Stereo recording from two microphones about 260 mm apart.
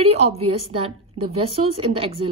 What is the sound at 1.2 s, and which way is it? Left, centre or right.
Speech, right.